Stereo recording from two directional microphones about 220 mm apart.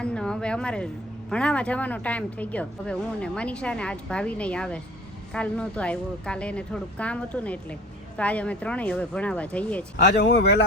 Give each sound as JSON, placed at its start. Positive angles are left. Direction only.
{"t": 0.0, "sound": "a sound", "side_deg": 5}
{"t": 1.3, "sound": "a woman's voice", "side_deg": 5}
{"t": 10.0, "sound": "speech", "side_deg": 50}